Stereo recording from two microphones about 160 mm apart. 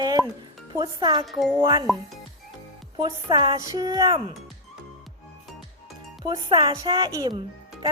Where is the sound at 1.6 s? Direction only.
30° right (ahead or behind).